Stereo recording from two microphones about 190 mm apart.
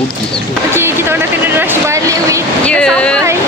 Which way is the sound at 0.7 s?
15° right (ahead or behind).